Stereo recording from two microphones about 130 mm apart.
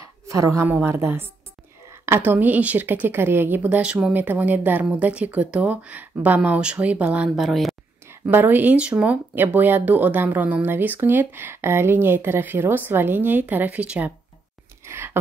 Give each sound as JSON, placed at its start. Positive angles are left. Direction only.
{"t": 0.0, "sound": "a sound", "side_deg": -25}
{"t": 0.8, "sound": "a woman's voice", "side_deg": -20}
{"t": 8.1, "sound": "speech", "side_deg": -15}
{"t": 14.9, "sound": "whispering", "side_deg": -20}